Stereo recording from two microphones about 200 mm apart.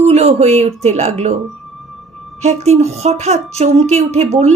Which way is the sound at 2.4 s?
35° right (ahead or behind).